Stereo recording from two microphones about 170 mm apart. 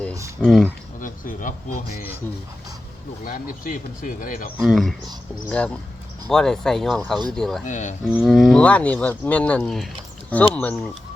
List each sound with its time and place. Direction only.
0.4 s speech: centre (ahead or behind)
1.0 s speech: 50° left (ahead or behind)
3.2 s speech: 55° left (ahead or behind)
4.6 s speech: centre (ahead or behind)
7.6 s speech: 45° left (ahead or behind)
8.1 s speech: centre (ahead or behind)